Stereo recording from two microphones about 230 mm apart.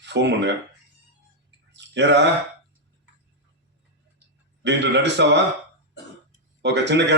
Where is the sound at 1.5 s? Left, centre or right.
Right.